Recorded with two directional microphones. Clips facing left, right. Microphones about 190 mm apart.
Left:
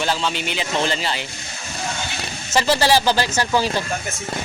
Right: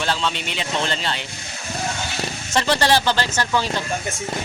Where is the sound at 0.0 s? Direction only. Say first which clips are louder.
Left 1 dB; 5° left (ahead or behind).